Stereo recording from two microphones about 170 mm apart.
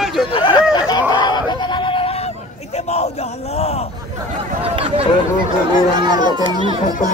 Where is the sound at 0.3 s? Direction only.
30° left (ahead or behind).